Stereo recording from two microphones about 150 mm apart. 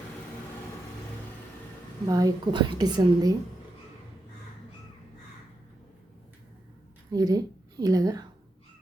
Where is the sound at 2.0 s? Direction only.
25° right (ahead or behind).